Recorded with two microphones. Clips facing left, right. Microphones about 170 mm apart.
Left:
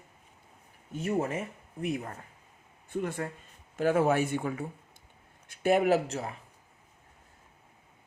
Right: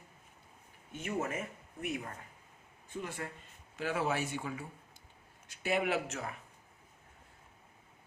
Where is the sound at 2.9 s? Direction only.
55° left (ahead or behind); by 6.3 s 35° left (ahead or behind).